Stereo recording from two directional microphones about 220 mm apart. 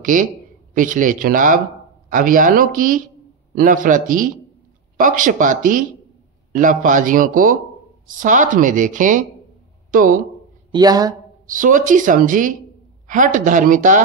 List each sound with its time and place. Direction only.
0.0 s speech: 35° right (ahead or behind)
10.7 s speech: 15° right (ahead or behind)
11.4 s speech: 35° right (ahead or behind)